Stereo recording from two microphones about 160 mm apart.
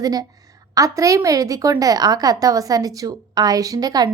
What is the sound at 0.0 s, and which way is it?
A woman's voice, 25° right (ahead or behind).